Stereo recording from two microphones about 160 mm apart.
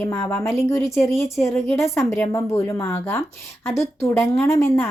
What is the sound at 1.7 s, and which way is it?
A woman's voice, 15° left (ahead or behind).